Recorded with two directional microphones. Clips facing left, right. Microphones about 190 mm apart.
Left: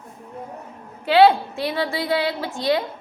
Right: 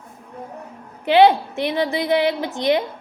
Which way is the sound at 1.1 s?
20° right (ahead or behind).